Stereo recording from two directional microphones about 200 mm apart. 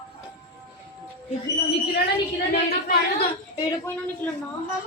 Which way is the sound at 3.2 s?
20° left (ahead or behind).